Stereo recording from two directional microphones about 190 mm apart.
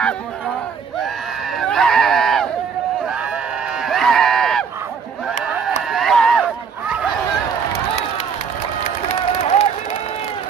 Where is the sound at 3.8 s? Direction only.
Centre (ahead or behind).